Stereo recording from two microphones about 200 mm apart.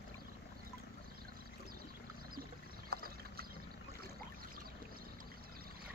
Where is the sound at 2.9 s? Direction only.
50° right (ahead or behind).